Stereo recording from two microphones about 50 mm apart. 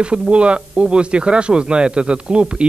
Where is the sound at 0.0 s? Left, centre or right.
Right.